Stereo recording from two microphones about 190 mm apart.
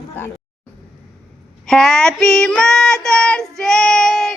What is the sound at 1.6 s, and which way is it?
Child singing, centre (ahead or behind).